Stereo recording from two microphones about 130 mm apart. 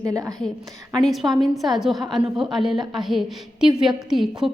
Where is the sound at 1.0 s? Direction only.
Centre (ahead or behind).